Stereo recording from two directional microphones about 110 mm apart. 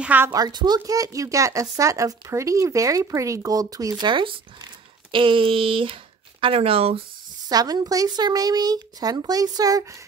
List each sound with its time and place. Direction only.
0.0 s speech: 15° right (ahead or behind)
0.3 s speech: 40° right (ahead or behind); by 7.0 s 65° right (ahead or behind)
7.4 s speech: 35° right (ahead or behind)